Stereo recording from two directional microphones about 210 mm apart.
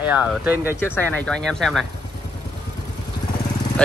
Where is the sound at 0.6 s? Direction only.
10° left (ahead or behind).